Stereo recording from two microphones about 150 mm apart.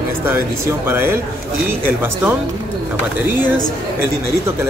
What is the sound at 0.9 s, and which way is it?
Speech, 15° right (ahead or behind).